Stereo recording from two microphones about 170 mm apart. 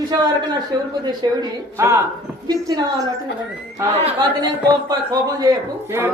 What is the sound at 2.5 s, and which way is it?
Singing, 20° right (ahead or behind).